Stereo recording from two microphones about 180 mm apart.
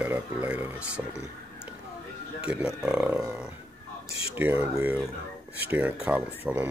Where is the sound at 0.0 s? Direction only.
10° right (ahead or behind).